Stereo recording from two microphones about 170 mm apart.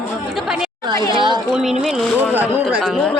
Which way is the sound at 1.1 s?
30° right (ahead or behind).